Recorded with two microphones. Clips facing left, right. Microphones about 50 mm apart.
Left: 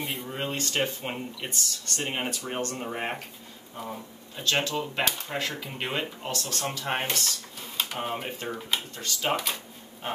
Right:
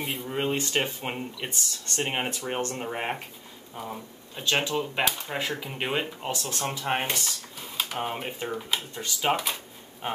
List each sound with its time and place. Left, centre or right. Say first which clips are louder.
0.0 s speech: right 1 dB; centre
0.3 s speech: right 6 dB; centre
2.0 s speech: even; right
2.8 s speech: right 1 dB; centre
8.9 s speech: right 4 dB; centre
10.0 s a sound: right 2 dB; centre